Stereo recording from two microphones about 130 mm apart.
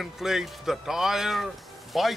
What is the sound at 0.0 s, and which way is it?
Speech, 5° right (ahead or behind).